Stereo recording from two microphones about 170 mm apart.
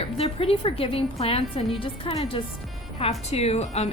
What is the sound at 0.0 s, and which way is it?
A woman's voice, 35° left (ahead or behind).